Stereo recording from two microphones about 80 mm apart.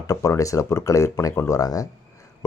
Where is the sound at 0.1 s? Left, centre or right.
Left.